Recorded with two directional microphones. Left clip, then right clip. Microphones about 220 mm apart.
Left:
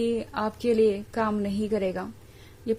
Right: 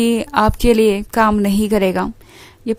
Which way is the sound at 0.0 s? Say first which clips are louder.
Right 12 dB; 40° right (ahead or behind).